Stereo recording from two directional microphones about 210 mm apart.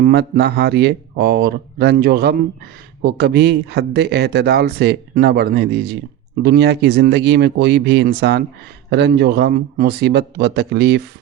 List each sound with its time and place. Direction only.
0.0 s speech: 50° right (ahead or behind)